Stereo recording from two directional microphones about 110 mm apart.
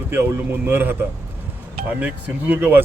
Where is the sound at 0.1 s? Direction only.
20° right (ahead or behind).